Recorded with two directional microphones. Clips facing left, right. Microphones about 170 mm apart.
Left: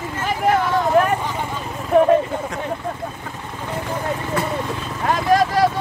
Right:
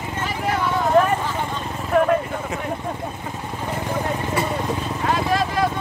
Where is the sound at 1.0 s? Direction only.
10° left (ahead or behind).